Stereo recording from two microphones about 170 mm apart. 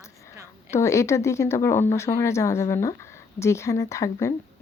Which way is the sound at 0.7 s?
15° left (ahead or behind).